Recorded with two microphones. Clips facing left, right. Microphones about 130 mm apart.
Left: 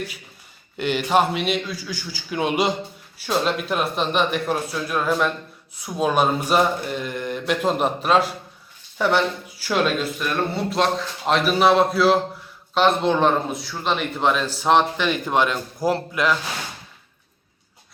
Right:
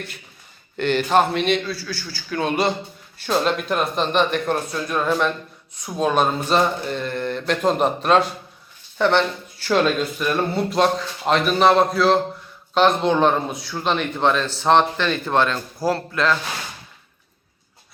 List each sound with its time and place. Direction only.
0.8 s a man's voice: 10° left (ahead or behind)